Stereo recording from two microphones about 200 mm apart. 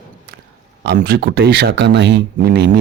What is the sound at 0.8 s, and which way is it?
Speech, 55° right (ahead or behind).